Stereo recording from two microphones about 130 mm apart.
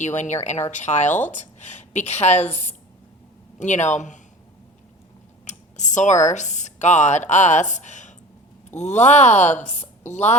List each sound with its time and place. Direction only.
0.0 s a woman's voice: 65° left (ahead or behind)
5.5 s a woman's voice: 65° left (ahead or behind)